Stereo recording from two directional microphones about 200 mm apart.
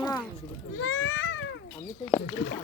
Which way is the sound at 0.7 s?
90° left.